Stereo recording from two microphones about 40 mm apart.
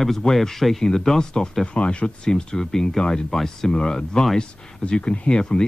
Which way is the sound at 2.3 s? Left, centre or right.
Centre.